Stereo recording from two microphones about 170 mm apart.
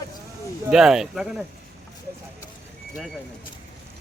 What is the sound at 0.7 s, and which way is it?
Speech, 5° right (ahead or behind).